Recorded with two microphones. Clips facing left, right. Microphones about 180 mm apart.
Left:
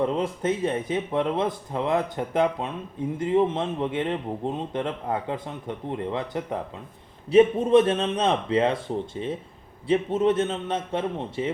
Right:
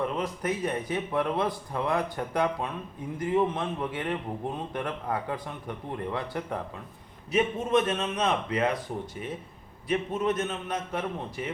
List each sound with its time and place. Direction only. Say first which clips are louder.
0.0 s speech: left 5 dB; 25° left (ahead or behind)
7.3 s speech: left 9 dB; 30° left (ahead or behind)